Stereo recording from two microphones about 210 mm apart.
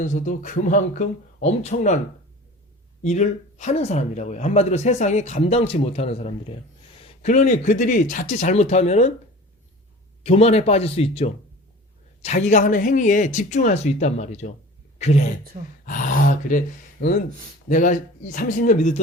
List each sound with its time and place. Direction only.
0.0 s speech: 35° left (ahead or behind)
3.0 s speech: 35° left (ahead or behind)
10.2 s speech: 30° left (ahead or behind)